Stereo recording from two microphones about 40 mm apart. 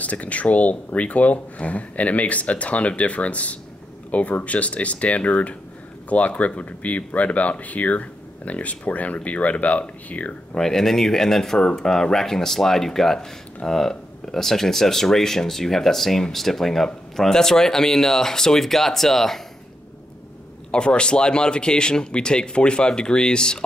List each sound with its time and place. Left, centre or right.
0.0 s speech: left
10.5 s speech: centre
20.7 s speech: left